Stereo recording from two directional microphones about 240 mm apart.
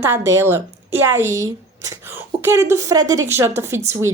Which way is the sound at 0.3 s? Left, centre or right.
Centre.